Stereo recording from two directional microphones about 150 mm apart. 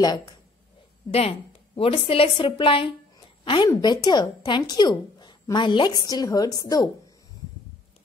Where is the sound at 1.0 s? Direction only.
40° left (ahead or behind); by 6.9 s 25° left (ahead or behind).